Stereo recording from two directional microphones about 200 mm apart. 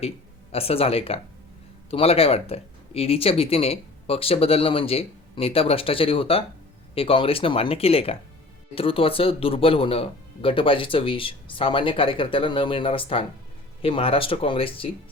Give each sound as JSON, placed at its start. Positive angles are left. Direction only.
{"t": 0.5, "sound": "speech", "side_deg": 30}